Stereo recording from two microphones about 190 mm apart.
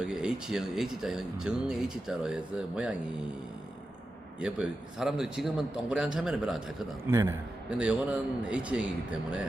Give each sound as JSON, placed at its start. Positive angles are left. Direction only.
{"t": 0.0, "sound": "speech", "side_deg": -5}
{"t": 4.4, "sound": "speech", "side_deg": -5}
{"t": 7.1, "sound": "a man's voice", "side_deg": -15}
{"t": 7.8, "sound": "speech", "side_deg": -5}